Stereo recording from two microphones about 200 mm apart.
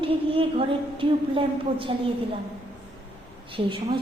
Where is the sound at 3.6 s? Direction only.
30° right (ahead or behind).